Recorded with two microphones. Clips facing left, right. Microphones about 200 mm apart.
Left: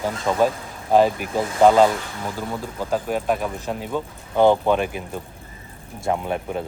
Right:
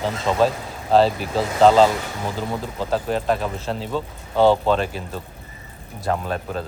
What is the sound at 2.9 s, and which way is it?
Speech, 10° left (ahead or behind).